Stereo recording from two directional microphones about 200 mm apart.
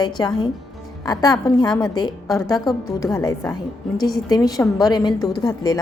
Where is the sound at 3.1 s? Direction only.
15° left (ahead or behind).